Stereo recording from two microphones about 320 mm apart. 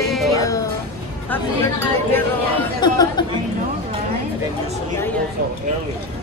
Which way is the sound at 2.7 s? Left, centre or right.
Centre.